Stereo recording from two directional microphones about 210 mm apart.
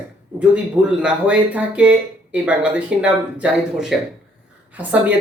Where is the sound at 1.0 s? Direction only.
5° right (ahead or behind).